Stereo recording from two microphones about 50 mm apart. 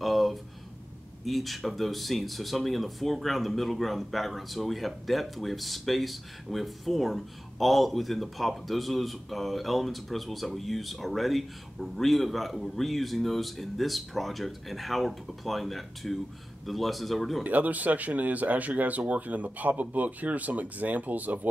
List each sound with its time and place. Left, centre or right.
0.0 s a sound: centre
1.2 s speech: centre
17.4 s speech: right